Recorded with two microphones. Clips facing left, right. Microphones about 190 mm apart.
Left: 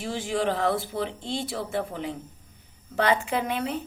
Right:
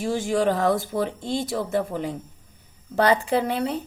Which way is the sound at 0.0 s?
45° right (ahead or behind).